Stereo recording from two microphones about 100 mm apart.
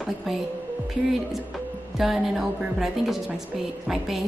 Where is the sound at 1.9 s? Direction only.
5° right (ahead or behind).